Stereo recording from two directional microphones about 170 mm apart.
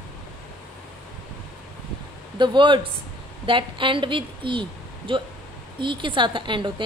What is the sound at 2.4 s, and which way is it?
A woman's voice, 30° right (ahead or behind).